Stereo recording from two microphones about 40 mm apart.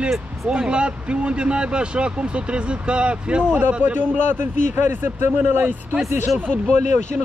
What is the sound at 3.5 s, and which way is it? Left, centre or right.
A man's voice, right.